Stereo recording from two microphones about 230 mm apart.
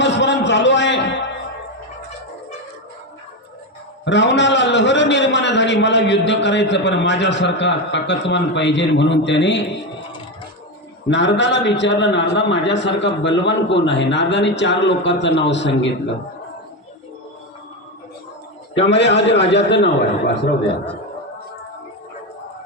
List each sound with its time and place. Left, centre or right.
0.0 s a sound: left
4.0 s a man's voice: left
11.1 s a man's voice: left
18.9 s a man's voice: left